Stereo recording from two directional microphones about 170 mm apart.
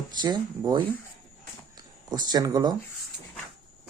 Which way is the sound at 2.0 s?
25° right (ahead or behind).